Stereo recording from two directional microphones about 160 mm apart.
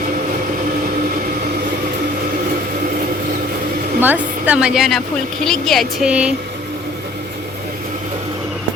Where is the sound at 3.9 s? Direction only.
10° right (ahead or behind).